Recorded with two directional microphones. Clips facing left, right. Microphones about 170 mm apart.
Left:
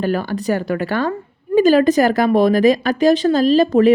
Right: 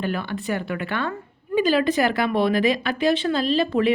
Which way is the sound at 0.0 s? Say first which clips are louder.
Left 7 dB; 40° left (ahead or behind).